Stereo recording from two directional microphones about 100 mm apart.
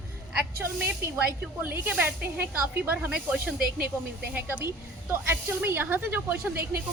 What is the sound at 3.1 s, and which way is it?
Speech, 5° right (ahead or behind).